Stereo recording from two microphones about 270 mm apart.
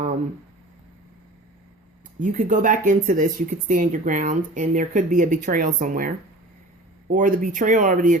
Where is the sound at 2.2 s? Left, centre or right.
Right.